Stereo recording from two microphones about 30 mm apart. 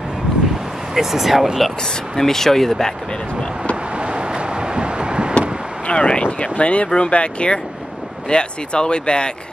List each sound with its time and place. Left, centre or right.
0.9 s speech: centre
2.1 s speech: centre
3.9 s vehicle: right
5.9 s speech: left